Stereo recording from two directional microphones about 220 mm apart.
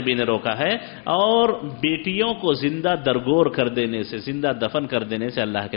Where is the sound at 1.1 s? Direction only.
35° left (ahead or behind).